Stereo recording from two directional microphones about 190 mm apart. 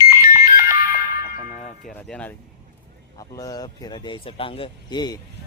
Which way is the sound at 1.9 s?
5° left (ahead or behind).